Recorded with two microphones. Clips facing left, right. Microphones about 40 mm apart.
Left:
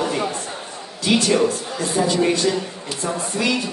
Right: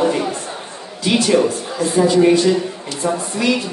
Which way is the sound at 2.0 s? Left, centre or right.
Centre.